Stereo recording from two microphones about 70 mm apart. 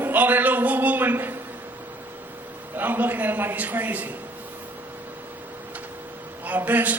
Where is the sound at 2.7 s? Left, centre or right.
Right.